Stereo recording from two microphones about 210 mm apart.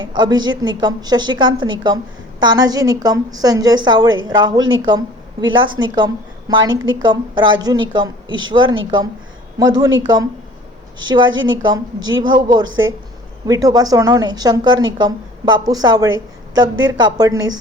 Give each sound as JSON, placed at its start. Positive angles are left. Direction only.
{"t": 0.0, "sound": "a woman's voice", "side_deg": -20}